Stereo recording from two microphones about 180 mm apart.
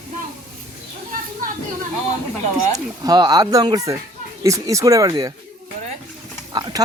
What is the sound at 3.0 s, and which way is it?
Speech, 20° right (ahead or behind).